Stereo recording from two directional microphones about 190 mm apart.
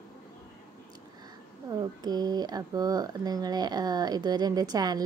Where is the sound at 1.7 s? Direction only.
20° right (ahead or behind).